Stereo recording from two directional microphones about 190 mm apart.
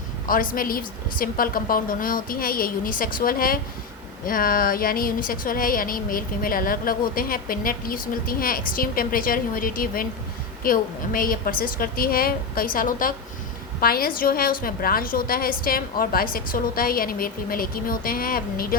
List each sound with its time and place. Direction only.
0.3 s speech: 50° left (ahead or behind)